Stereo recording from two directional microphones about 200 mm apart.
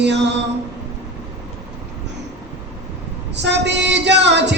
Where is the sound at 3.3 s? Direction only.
60° right (ahead or behind).